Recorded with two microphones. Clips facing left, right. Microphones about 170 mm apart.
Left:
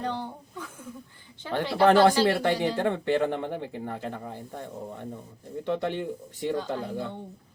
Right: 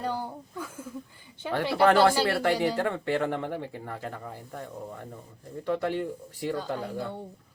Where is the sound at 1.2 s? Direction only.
10° right (ahead or behind).